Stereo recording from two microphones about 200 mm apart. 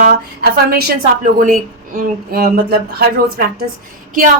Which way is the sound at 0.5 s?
50° right (ahead or behind).